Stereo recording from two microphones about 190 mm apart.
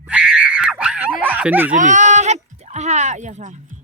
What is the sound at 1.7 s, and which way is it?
Speech, 40° right (ahead or behind).